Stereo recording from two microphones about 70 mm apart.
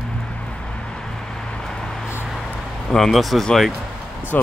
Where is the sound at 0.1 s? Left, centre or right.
Centre.